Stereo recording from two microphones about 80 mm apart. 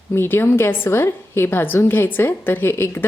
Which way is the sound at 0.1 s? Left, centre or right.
Left.